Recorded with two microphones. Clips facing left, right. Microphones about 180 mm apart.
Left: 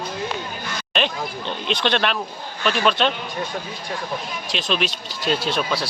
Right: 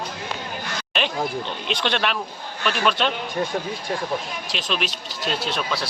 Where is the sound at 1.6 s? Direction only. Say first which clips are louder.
Left 3 dB; 10° right (ahead or behind).